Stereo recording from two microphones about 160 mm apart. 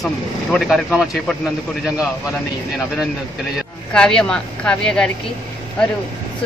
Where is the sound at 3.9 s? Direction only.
5° left (ahead or behind).